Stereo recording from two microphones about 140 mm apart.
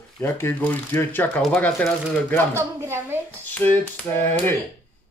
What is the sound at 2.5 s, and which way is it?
Speech, 15° right (ahead or behind).